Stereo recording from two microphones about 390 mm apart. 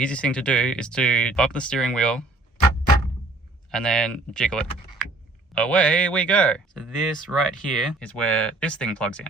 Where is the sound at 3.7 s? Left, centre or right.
Centre.